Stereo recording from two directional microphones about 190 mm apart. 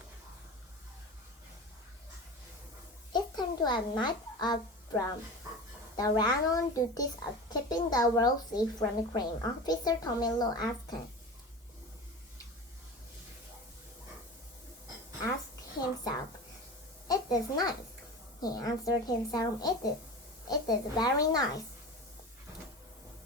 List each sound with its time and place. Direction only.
3.1 s a sound: 20° left (ahead or behind)
6.0 s speech: 20° left (ahead or behind)
17.1 s a child's voice: 20° left (ahead or behind)